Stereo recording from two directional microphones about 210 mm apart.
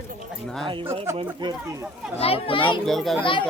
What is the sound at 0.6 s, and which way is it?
Speech, 25° right (ahead or behind).